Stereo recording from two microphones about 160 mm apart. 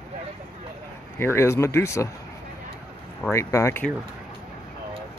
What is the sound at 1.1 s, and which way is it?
Speech, 15° left (ahead or behind).